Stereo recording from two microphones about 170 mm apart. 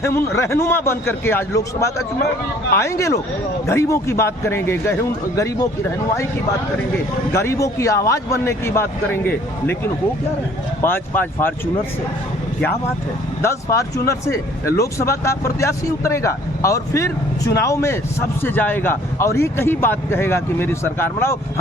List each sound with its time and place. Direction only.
0.0 s speech: 15° left (ahead or behind)
2.1 s a man's voice: 60° left (ahead or behind)
2.7 s speech: 15° left (ahead or behind)
7.3 s speech: 15° left (ahead or behind)
10.8 s speech: 15° left (ahead or behind)
13.4 s speech: 15° left (ahead or behind)